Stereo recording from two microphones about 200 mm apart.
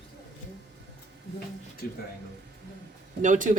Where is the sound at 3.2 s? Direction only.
40° right (ahead or behind).